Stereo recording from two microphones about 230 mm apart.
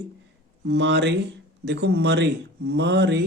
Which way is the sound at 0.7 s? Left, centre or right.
Right.